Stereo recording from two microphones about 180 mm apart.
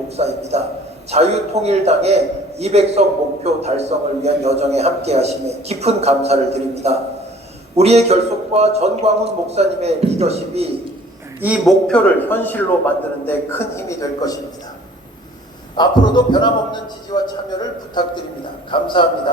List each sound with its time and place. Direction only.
0.2 s a man's voice: 35° right (ahead or behind)
11.3 s a man's voice: 10° right (ahead or behind)
11.9 s a man's voice: 5° left (ahead or behind)
15.7 s a man's voice: 25° left (ahead or behind)